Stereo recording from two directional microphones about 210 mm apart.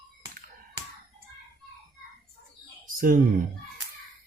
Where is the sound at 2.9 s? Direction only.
40° right (ahead or behind).